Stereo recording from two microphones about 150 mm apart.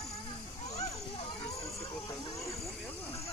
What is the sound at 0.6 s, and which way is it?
Children playing, 40° left (ahead or behind).